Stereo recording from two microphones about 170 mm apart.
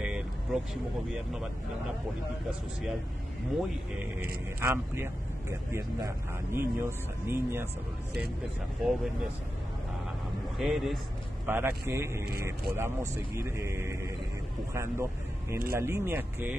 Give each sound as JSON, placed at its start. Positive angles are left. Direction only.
{"t": 0.0, "sound": "vehicle", "side_deg": -5}
{"t": 4.6, "sound": "speech", "side_deg": -15}
{"t": 8.8, "sound": "speech", "side_deg": 0}
{"t": 10.6, "sound": "speech", "side_deg": 0}
{"t": 11.4, "sound": "speech", "side_deg": -10}